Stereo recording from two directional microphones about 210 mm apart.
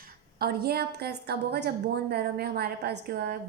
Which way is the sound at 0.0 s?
45° right (ahead or behind).